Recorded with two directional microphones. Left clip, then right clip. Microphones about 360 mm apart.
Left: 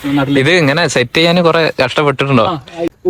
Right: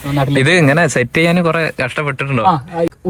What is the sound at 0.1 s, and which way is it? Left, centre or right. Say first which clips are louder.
Speech: left 2 dB; centre.